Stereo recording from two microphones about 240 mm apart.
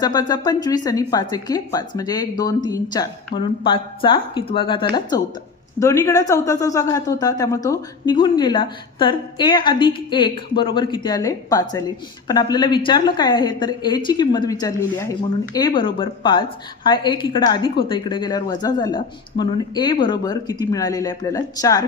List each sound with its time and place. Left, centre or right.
0.0 s a woman's voice: centre